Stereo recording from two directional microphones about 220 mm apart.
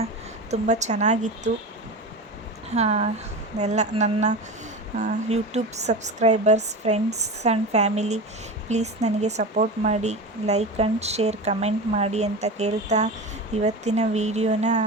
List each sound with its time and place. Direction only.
0.5 s speech: 30° right (ahead or behind)
2.6 s speech: 30° right (ahead or behind)